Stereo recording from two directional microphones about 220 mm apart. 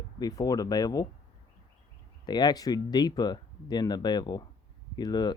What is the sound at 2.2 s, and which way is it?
Speech, 20° left (ahead or behind).